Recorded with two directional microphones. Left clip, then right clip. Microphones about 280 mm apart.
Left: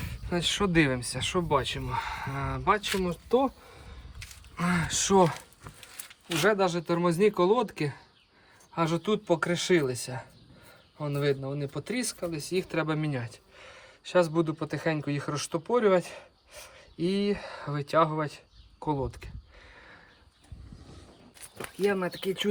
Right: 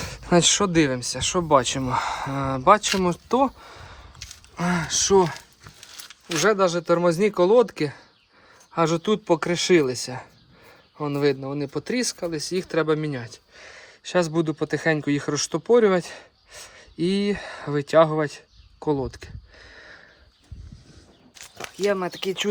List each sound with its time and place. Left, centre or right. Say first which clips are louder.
0.0 s speech: right 11 dB; right
4.5 s speech: right 5 dB; centre
6.4 s speech: right 5 dB; right
21.6 s speech: right 4 dB; centre